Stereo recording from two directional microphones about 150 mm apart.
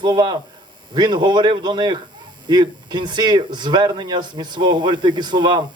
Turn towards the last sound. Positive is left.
turn(degrees=-30)  # may be behind; listen again after turning